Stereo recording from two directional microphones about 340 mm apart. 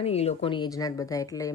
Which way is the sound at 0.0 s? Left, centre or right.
Centre.